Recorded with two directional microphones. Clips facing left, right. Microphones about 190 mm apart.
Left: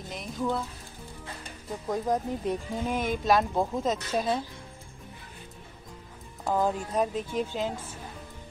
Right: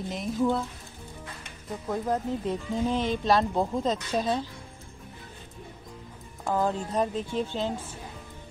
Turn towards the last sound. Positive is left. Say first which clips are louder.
# right 1 dB
turn(degrees=10)  # may be behind; listen again after turning